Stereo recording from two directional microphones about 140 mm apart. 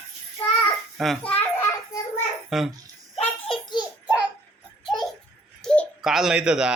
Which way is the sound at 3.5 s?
30° left (ahead or behind).